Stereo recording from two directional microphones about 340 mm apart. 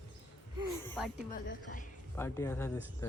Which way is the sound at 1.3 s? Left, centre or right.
Left.